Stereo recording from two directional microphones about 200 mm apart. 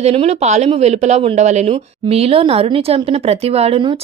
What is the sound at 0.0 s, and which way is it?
Speech, 30° right (ahead or behind).